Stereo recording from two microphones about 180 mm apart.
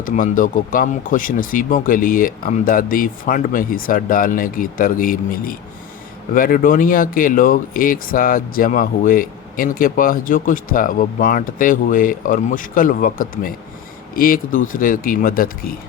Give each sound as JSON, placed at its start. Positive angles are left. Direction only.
{"t": 0.0, "sound": "speech", "side_deg": 50}